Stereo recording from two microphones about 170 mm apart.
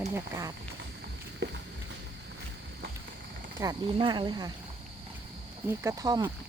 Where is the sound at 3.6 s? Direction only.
25° right (ahead or behind).